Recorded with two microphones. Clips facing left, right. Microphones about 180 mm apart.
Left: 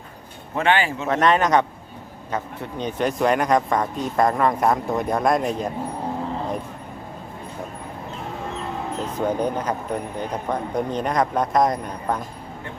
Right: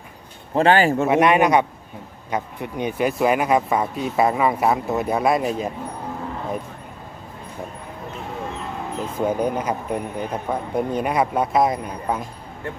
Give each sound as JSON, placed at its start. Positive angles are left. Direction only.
{"t": 0.5, "sound": "speech", "side_deg": -35}
{"t": 1.0, "sound": "speech", "side_deg": -10}
{"t": 9.0, "sound": "speech", "side_deg": -10}